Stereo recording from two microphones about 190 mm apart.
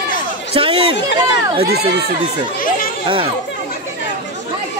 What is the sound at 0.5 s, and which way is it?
Chatter, 30° right (ahead or behind).